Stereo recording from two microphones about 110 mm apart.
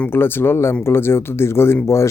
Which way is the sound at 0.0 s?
20° left (ahead or behind).